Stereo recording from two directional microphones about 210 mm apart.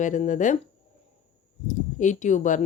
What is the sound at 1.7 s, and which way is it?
Speech, 35° left (ahead or behind).